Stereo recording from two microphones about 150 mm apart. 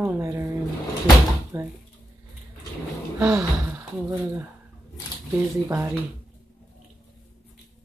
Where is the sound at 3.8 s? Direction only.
15° right (ahead or behind).